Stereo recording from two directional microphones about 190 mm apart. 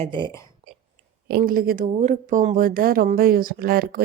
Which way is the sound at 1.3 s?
55° right (ahead or behind).